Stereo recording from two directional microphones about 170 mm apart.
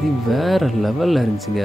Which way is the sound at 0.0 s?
Centre (ahead or behind).